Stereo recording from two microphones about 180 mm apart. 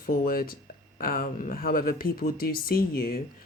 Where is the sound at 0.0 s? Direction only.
55° left (ahead or behind).